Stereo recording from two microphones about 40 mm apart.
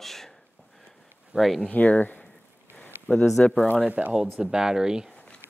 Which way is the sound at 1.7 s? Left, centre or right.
Left.